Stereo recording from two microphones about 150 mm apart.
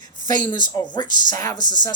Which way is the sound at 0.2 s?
60° right (ahead or behind).